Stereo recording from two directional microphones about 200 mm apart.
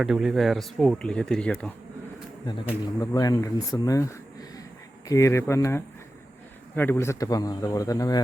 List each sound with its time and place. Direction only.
0.0 s speech: centre (ahead or behind)
3.0 s a man's voice: 20° left (ahead or behind)